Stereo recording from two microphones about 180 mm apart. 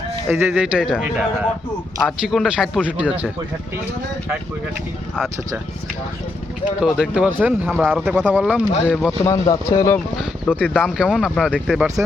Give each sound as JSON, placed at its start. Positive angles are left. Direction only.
{"t": 0.3, "sound": "a man's voice", "side_deg": -10}
{"t": 6.8, "sound": "speech", "side_deg": 0}
{"t": 7.9, "sound": "a man's voice", "side_deg": 0}
{"t": 9.2, "sound": "speech", "side_deg": 20}
{"t": 10.2, "sound": "a man's voice", "side_deg": 5}